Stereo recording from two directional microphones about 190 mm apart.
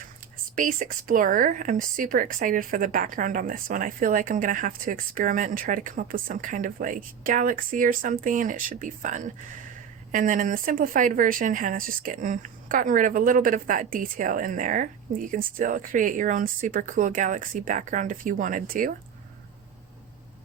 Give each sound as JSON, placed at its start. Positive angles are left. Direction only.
{"t": 0.5, "sound": "speech", "side_deg": -45}